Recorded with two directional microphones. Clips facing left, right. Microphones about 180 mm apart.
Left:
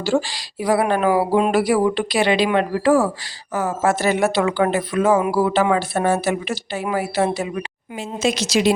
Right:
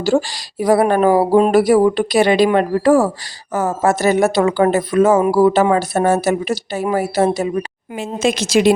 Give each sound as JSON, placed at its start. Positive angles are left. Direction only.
{"t": 0.0, "sound": "speech", "side_deg": -45}
{"t": 7.9, "sound": "speech", "side_deg": -55}